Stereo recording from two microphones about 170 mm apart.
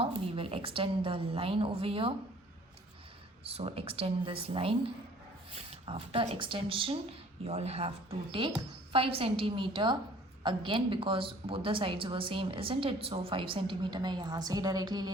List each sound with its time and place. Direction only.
0.0 s a woman's voice: 35° right (ahead or behind)
3.4 s a woman's voice: 35° right (ahead or behind)